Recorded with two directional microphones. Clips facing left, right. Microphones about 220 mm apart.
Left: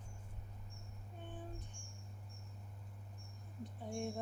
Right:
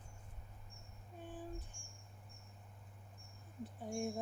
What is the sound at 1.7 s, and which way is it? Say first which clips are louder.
Cricket: left 3 dB; 25° right (ahead or behind).